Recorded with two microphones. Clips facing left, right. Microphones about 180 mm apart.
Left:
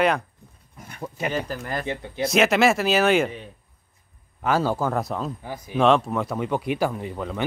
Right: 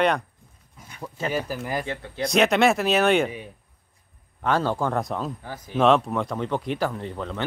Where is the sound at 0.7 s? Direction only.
55° left (ahead or behind).